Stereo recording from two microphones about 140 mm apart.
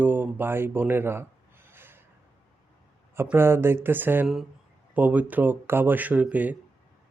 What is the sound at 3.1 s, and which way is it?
A man's voice, 15° right (ahead or behind).